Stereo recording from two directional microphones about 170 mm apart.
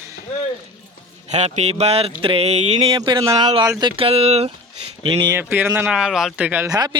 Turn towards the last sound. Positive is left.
turn(degrees=-25)  # may be behind; listen again after turning